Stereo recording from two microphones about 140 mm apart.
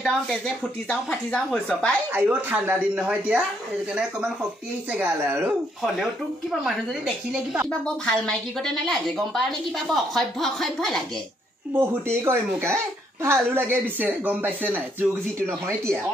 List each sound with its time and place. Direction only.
0.0 s a woman's voice: centre (ahead or behind)
2.1 s speech: 10° right (ahead or behind)
6.6 s a woman's voice: centre (ahead or behind)
11.7 s speech: 15° right (ahead or behind)